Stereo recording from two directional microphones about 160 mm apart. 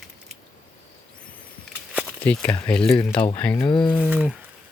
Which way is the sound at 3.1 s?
30° left (ahead or behind).